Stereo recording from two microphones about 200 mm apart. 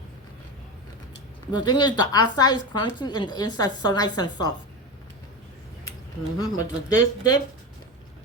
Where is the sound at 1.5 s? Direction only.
20° left (ahead or behind).